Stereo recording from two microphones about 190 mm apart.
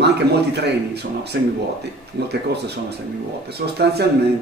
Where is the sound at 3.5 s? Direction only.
60° right (ahead or behind).